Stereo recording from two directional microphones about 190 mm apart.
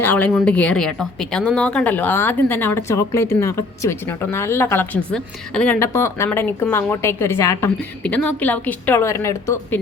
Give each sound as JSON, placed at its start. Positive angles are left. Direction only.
{"t": 0.0, "sound": "a woman's voice", "side_deg": 10}